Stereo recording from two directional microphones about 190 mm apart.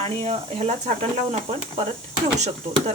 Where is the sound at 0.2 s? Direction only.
35° right (ahead or behind).